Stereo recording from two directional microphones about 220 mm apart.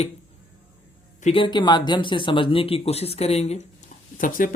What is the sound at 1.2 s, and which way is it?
Speech, 25° left (ahead or behind).